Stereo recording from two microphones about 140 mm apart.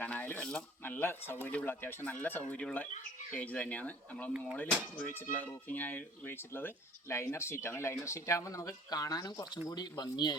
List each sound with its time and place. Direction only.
0.0 s speech: 10° left (ahead or behind)
4.3 s speech: 10° right (ahead or behind)
5.3 s speech: 10° left (ahead or behind); by 10.3 s 30° left (ahead or behind)